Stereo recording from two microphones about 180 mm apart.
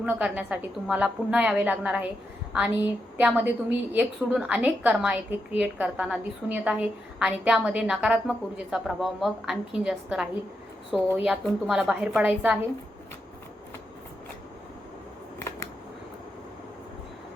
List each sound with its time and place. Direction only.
0.0 s a woman's voice: 5° right (ahead or behind)
3.2 s a woman's voice: 10° right (ahead or behind)